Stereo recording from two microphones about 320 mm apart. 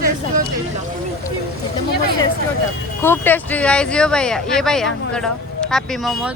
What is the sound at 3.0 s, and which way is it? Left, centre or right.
Speech, centre.